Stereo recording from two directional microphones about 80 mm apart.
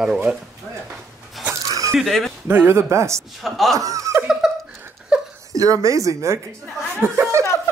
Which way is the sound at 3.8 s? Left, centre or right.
Right.